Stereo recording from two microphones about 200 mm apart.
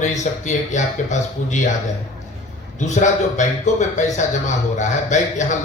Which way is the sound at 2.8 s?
35° left (ahead or behind).